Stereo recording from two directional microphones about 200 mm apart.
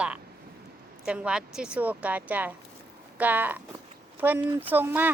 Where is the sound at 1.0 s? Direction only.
5° right (ahead or behind).